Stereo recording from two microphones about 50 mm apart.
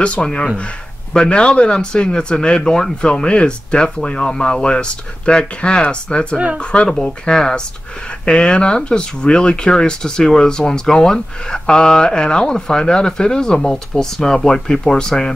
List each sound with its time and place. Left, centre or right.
0.0 s speech: left